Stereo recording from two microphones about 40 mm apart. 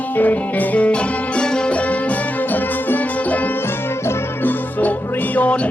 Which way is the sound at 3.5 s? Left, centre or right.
Left.